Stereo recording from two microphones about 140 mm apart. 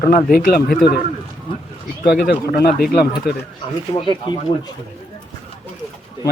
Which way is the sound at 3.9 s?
30° left (ahead or behind).